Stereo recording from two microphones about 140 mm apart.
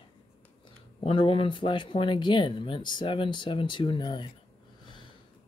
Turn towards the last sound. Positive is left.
turn(degrees=35)  # may be behind; listen again after turning